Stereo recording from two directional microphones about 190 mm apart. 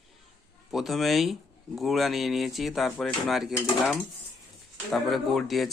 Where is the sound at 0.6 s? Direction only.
Centre (ahead or behind).